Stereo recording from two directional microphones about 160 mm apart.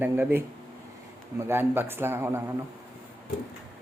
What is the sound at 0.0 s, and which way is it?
Speech, 10° right (ahead or behind).